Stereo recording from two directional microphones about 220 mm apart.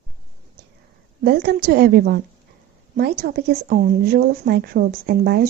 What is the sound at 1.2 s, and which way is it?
A woman's voice, 45° right (ahead or behind).